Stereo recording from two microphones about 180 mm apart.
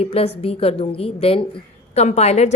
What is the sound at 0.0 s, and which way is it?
A woman's voice, 35° left (ahead or behind).